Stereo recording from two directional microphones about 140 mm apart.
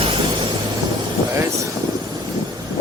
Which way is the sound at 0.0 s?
40° right (ahead or behind).